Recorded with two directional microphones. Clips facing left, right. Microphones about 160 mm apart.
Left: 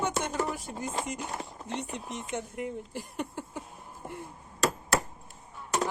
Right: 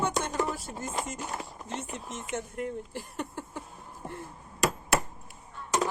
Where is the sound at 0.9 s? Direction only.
25° left (ahead or behind).